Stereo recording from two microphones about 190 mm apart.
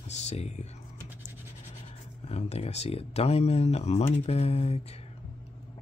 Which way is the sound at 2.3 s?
35° left (ahead or behind).